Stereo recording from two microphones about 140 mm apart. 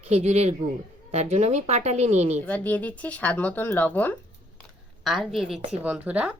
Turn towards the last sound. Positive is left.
turn(degrees=-10)  # may be behind; listen again after turning